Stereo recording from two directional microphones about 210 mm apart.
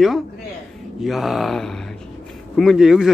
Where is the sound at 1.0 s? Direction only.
Centre (ahead or behind).